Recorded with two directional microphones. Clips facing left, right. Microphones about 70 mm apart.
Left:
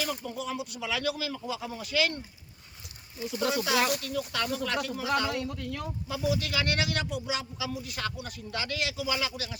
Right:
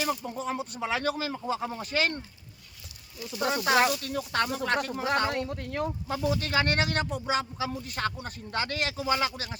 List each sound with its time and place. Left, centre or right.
0.0 s speech: right
3.3 s speech: right